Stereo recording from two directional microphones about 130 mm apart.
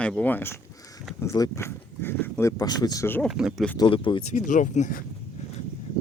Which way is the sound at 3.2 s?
5° right (ahead or behind).